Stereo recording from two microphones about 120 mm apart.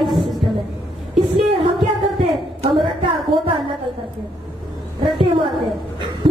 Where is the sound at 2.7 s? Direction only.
45° right (ahead or behind).